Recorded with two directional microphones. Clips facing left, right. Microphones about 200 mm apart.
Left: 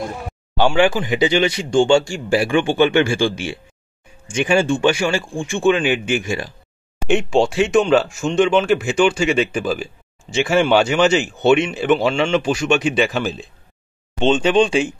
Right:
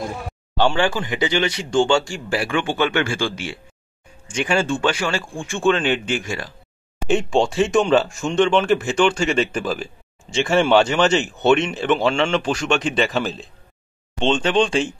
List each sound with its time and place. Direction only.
0.7 s speech: 15° left (ahead or behind)